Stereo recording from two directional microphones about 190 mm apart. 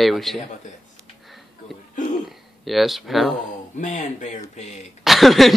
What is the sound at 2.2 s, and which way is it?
Speech, centre (ahead or behind).